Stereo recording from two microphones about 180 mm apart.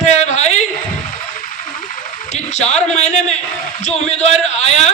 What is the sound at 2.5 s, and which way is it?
A man's voice, 40° left (ahead or behind).